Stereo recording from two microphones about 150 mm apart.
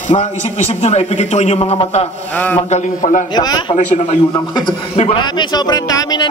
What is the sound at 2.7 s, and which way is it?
Speech, 55° left (ahead or behind).